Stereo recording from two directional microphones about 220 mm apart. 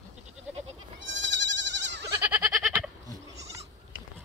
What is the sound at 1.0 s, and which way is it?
Goat, 55° right (ahead or behind).